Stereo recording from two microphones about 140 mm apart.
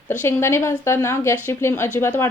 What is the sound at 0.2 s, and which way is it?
A woman's voice, 15° left (ahead or behind).